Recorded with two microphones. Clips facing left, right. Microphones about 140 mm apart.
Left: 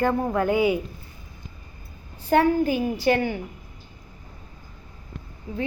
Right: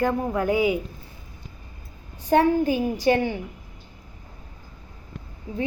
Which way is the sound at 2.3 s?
20° right (ahead or behind).